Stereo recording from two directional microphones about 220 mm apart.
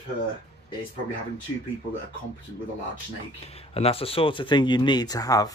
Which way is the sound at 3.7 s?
25° left (ahead or behind).